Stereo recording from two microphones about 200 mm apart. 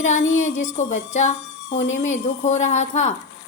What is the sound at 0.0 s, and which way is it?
A woman's voice, 35° left (ahead or behind).